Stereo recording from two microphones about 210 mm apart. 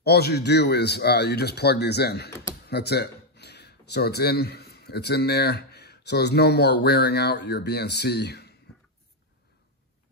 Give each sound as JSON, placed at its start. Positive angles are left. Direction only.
{"t": 0.0, "sound": "a man's voice", "side_deg": 50}